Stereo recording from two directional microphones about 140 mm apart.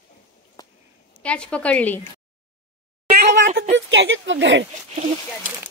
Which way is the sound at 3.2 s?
55° right (ahead or behind).